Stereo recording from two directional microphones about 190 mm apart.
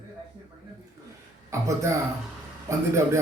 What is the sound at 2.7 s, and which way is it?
Speech, 15° right (ahead or behind).